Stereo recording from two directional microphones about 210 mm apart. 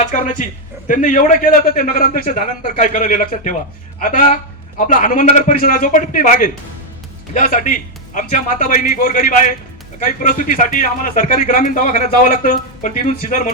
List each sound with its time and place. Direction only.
0.1 s a man's voice: 40° left (ahead or behind)